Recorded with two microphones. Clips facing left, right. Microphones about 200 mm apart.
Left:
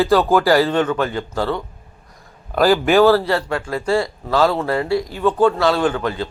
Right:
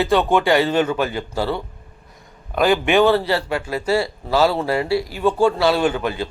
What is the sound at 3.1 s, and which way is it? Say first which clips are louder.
Speech: left 1 dB; 25° right (ahead or behind).